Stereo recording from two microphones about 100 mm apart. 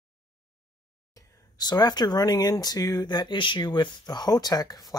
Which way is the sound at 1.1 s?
40° left (ahead or behind).